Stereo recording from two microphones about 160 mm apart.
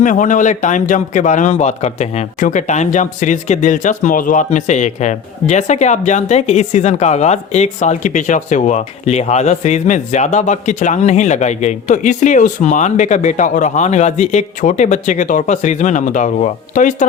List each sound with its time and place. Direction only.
0.0 s a man's voice: 55° left (ahead or behind)